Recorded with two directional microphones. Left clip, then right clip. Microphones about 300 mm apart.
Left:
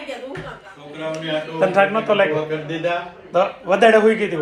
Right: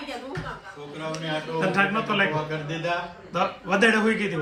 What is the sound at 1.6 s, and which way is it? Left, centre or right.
A man's voice, centre.